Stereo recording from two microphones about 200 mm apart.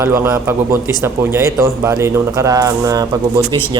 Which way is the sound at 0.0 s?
15° right (ahead or behind).